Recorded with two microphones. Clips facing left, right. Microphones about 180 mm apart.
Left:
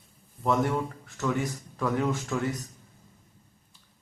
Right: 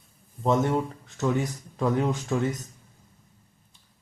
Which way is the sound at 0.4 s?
20° right (ahead or behind).